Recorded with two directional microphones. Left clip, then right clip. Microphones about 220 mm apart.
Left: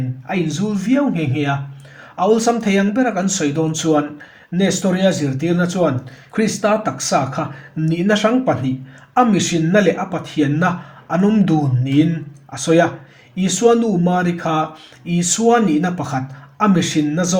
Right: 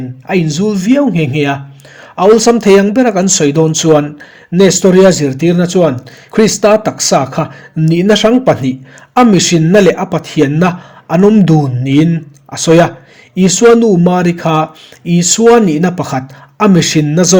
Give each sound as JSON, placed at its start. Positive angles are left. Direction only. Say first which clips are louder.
{"t": 0.3, "sound": "speech", "louder": "right 9 dB", "side_deg": -30}